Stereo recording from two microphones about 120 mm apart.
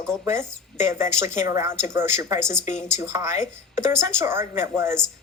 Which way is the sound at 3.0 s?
20° right (ahead or behind).